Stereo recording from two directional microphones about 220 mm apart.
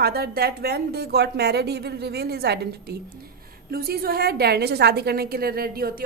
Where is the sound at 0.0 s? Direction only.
45° right (ahead or behind).